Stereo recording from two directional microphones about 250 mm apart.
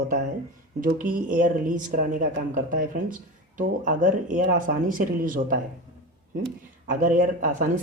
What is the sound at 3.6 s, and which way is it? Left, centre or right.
Speech, right.